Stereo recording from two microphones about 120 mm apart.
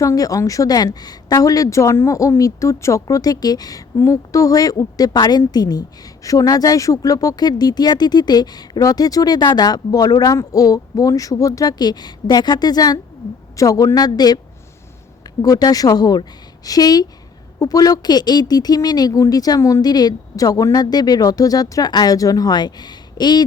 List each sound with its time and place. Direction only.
0.0 s a woman's voice: 30° left (ahead or behind)
15.4 s speech: 30° left (ahead or behind)